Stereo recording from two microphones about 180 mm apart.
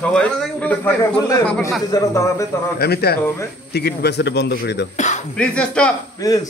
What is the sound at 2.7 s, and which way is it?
A man's voice, 60° left (ahead or behind).